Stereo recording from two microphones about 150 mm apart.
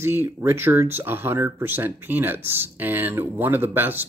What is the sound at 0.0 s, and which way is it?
Speech, 15° right (ahead or behind).